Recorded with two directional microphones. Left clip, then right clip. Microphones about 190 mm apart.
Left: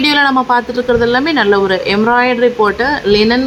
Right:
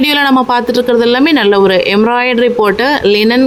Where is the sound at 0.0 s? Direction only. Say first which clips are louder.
Right 1 dB; 40° right (ahead or behind).